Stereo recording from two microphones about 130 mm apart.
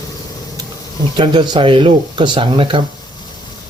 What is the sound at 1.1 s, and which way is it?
Speech, 40° right (ahead or behind).